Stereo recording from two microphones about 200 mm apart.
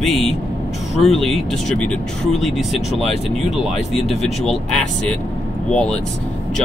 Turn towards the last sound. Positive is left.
turn(degrees=5)  # may be behind; listen again after turning